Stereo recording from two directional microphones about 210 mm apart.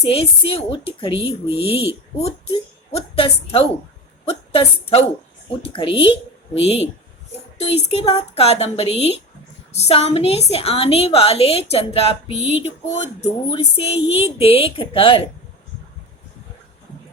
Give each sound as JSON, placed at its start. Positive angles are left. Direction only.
{"t": 0.0, "sound": "a woman's voice", "side_deg": 25}